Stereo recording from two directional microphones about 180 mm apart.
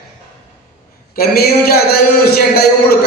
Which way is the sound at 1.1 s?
60° left (ahead or behind).